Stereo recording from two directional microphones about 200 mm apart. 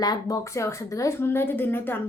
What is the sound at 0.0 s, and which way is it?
Speech, 20° left (ahead or behind).